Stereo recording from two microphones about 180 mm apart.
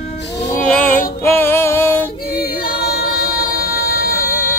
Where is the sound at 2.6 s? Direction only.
60° left (ahead or behind).